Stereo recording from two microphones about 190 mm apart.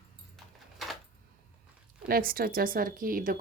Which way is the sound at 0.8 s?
Centre (ahead or behind).